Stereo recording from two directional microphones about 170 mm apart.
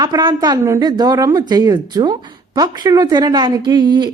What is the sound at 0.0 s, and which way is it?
Speech, 25° right (ahead or behind).